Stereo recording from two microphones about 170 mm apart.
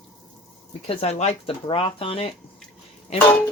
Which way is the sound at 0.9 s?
40° left (ahead or behind).